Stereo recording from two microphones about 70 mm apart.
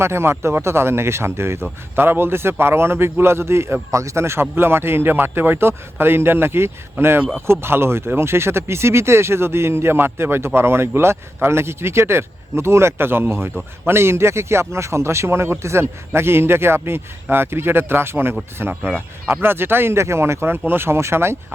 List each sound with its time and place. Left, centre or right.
0.0 s speech: right